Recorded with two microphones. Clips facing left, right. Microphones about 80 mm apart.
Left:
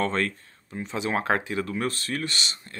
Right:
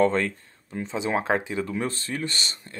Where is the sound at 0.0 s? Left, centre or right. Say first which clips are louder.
Right 4 dB; left.